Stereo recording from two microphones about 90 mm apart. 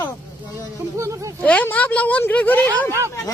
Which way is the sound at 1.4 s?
20° left (ahead or behind).